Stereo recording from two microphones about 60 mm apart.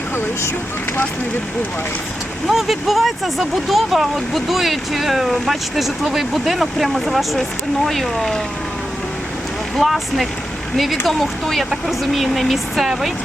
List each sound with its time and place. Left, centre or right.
2.5 s speech: centre
9.7 s speech: centre